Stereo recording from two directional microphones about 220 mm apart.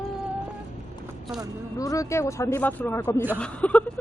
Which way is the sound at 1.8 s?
15° left (ahead or behind).